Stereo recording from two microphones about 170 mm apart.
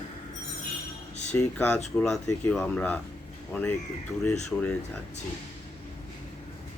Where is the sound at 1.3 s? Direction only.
5° left (ahead or behind).